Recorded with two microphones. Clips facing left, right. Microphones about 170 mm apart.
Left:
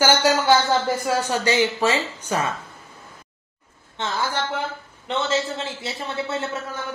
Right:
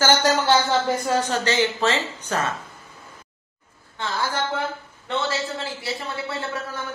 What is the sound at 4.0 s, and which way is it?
A man's voice, 25° left (ahead or behind).